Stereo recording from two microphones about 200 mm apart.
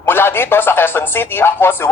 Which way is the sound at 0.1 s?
10° left (ahead or behind).